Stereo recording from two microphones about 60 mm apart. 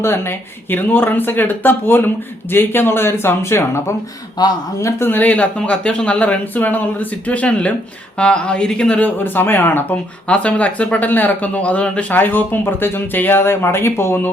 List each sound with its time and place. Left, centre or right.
0.0 s speech: left
4.4 s speech: left
4.9 s speech: left; by 9.0 s centre
9.0 s speech: left
10.2 s speech: centre; by 14.2 s left